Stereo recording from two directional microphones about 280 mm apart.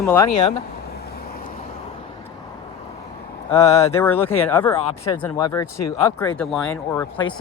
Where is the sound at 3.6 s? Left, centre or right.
Left.